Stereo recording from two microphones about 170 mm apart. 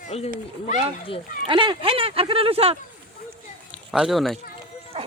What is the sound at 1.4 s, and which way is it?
Speech, 30° right (ahead or behind).